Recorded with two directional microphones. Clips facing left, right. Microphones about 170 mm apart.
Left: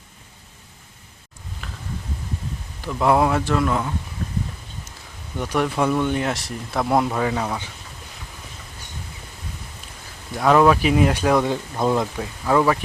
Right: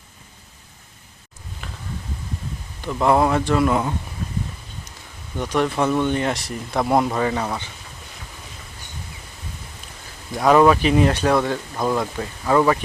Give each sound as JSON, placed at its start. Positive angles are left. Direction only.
{"t": 1.6, "sound": "a sound", "side_deg": 0}
{"t": 2.8, "sound": "speech", "side_deg": 5}
{"t": 5.4, "sound": "speech", "side_deg": 5}
{"t": 10.3, "sound": "speech", "side_deg": 0}
{"t": 12.1, "sound": "speech", "side_deg": 0}